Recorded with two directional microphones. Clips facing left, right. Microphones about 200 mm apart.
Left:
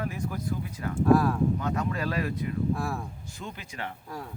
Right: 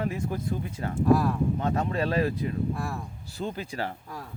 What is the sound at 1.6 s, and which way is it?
Speech, 30° right (ahead or behind).